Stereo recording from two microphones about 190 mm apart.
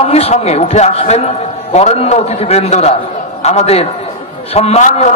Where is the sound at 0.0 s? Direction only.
35° left (ahead or behind).